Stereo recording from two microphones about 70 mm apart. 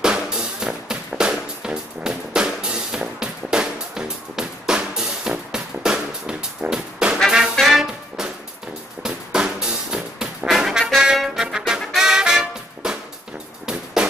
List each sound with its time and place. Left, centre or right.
0.0 s music: centre
14.0 s music: centre